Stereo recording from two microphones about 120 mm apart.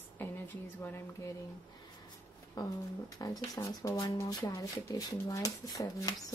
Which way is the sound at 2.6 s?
30° left (ahead or behind).